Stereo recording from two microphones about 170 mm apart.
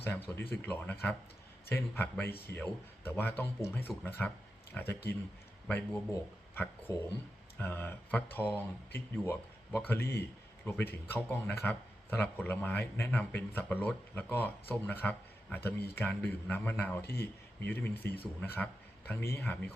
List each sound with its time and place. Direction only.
0.0 s speech: 15° left (ahead or behind)